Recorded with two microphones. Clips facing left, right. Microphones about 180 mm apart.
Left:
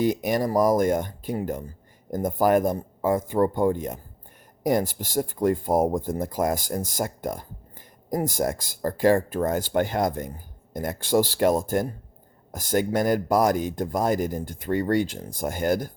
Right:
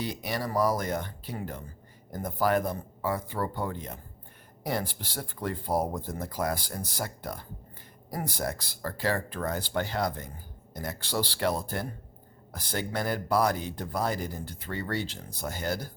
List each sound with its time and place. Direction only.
0.0 s speech: 45° left (ahead or behind)